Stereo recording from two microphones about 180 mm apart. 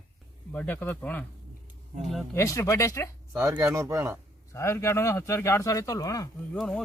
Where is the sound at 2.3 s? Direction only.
15° left (ahead or behind).